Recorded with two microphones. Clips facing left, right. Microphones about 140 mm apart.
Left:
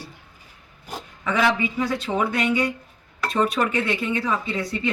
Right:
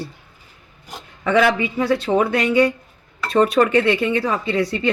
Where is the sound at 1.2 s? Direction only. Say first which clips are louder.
Right 5 dB; 60° right (ahead or behind).